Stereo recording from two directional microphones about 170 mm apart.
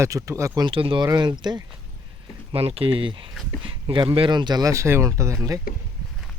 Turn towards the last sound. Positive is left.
turn(degrees=-20)  # may be behind; listen again after turning